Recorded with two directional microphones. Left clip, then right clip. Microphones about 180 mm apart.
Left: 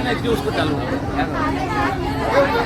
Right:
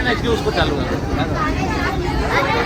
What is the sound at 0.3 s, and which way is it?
Speech, 20° right (ahead or behind).